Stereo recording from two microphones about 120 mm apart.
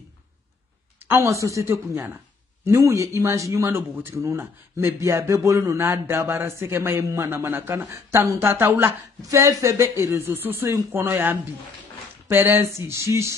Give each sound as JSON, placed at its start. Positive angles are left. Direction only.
{"t": 1.0, "sound": "speech", "side_deg": -25}